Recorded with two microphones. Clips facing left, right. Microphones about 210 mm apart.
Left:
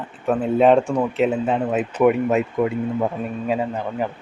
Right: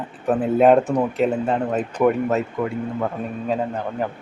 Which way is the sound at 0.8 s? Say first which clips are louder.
Right 1 dB; 20° right (ahead or behind).